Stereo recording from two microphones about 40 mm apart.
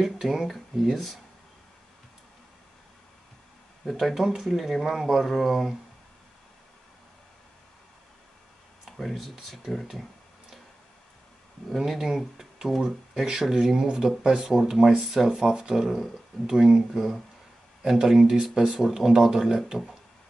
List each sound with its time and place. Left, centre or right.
0.0 s speech: centre
4.1 s speech: centre
8.8 s speech: centre
11.9 s speech: centre